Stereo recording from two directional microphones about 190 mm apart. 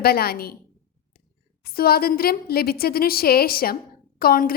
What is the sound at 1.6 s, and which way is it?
A woman's voice, 50° left (ahead or behind).